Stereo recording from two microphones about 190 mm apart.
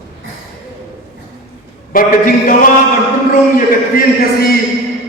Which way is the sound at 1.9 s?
50° left (ahead or behind).